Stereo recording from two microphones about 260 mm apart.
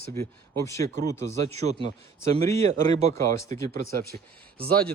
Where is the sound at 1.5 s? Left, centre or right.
Right.